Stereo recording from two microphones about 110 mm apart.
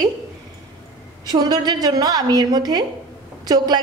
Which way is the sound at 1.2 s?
40° right (ahead or behind).